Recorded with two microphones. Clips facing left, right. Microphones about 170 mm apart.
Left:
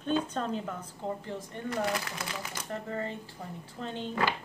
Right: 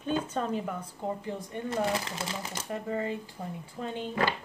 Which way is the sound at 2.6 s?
10° right (ahead or behind).